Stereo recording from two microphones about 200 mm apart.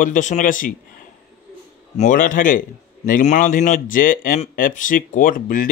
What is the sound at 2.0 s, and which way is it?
A man's voice, 40° left (ahead or behind).